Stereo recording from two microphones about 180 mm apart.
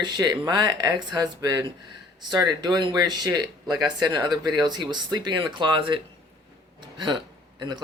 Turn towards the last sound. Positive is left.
turn(degrees=-25)  # may be behind; listen again after turning